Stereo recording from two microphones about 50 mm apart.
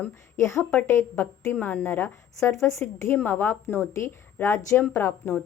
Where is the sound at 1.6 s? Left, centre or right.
Left.